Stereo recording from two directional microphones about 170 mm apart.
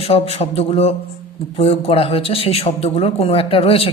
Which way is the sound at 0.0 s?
35° left (ahead or behind).